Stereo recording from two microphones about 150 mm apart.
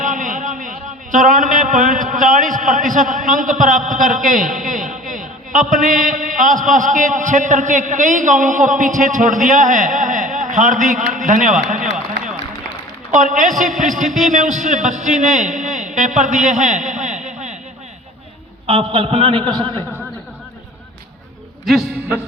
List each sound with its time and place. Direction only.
0.0 s a man's voice: 60° right (ahead or behind)
11.8 s run: 5° right (ahead or behind)
13.1 s a man's voice: 55° right (ahead or behind)
18.6 s a man's voice: 40° right (ahead or behind)
21.7 s a man's voice: centre (ahead or behind)